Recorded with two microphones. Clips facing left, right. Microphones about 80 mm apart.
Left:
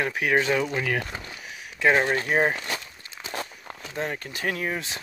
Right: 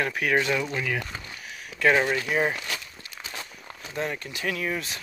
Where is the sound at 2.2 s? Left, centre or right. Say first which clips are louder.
Left 2 dB; left.